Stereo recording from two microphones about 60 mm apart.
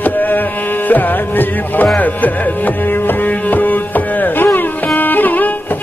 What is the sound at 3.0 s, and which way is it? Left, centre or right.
Music, left.